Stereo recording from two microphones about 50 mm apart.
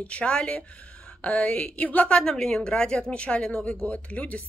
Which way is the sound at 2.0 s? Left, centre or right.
Centre.